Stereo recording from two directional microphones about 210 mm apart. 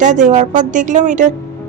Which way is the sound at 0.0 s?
35° right (ahead or behind).